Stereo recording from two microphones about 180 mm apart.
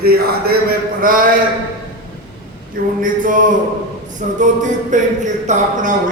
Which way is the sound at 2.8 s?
50° right (ahead or behind).